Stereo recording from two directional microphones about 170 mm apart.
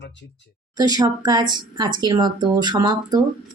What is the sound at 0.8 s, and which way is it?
Speech, 25° right (ahead or behind).